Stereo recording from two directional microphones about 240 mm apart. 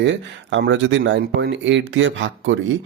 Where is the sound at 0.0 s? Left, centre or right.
Right.